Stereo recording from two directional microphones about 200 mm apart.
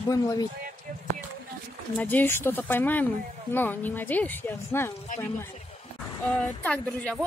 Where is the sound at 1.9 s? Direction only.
10° left (ahead or behind).